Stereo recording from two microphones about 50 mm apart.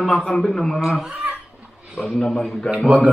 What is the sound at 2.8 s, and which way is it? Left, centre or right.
Speech, right.